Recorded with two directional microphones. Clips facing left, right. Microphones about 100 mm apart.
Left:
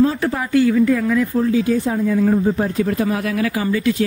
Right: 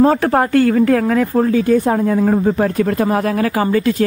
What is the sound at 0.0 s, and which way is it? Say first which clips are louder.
A woman's voice: right 5 dB; 55° right (ahead or behind).